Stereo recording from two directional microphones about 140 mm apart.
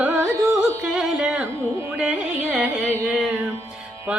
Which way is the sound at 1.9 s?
10° right (ahead or behind).